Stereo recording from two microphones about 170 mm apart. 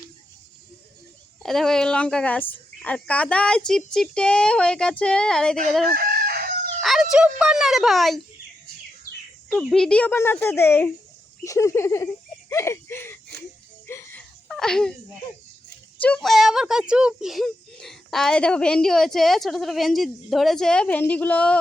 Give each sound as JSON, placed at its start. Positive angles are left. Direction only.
{"t": 1.4, "sound": "speech", "side_deg": 0}
{"t": 5.9, "sound": "chicken", "side_deg": -60}
{"t": 6.8, "sound": "speech", "side_deg": 0}
{"t": 9.5, "sound": "speech", "side_deg": 5}
{"t": 13.8, "sound": "a sound", "side_deg": 10}
{"t": 14.4, "sound": "a sound", "side_deg": 0}
{"t": 16.0, "sound": "speech", "side_deg": 5}